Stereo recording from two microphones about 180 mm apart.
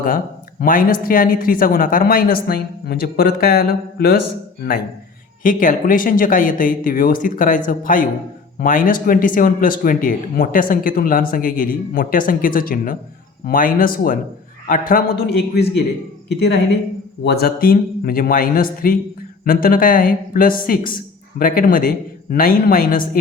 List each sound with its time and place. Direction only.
0.6 s speech: 50° left (ahead or behind)
5.4 s a man's voice: 50° left (ahead or behind); by 15.8 s 65° left (ahead or behind)
17.2 s speech: 60° left (ahead or behind)